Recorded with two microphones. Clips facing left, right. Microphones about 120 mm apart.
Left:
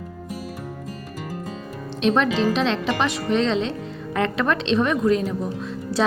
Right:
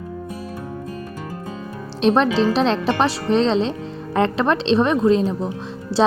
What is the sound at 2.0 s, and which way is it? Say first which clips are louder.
A woman's voice: right 3 dB; 35° right (ahead or behind).